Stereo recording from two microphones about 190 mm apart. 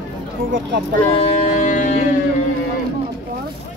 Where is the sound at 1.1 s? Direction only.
30° left (ahead or behind).